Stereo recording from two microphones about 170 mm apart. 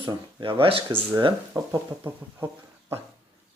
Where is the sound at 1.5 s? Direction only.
15° right (ahead or behind).